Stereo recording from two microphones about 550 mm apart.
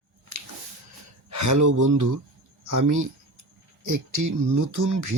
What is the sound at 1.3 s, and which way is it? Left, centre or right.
Speech, right.